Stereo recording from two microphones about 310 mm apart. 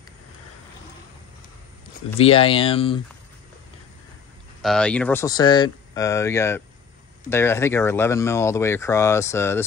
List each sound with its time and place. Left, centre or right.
2.1 s speech: centre
4.6 s speech: centre